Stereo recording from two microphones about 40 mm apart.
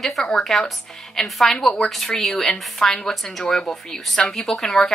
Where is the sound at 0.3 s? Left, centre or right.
Centre.